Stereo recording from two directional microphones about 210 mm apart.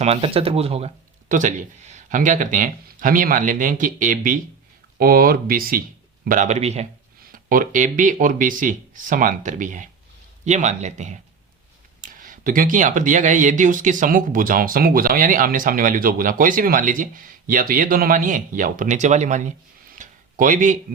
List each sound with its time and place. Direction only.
0.0 s speech: 30° right (ahead or behind)
7.3 s speech: 40° right (ahead or behind)